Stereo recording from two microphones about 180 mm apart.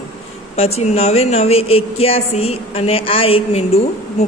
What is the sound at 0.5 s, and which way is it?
Speech, 35° left (ahead or behind).